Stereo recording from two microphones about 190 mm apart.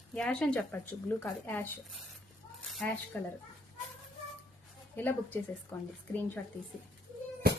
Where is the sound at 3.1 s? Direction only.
10° left (ahead or behind).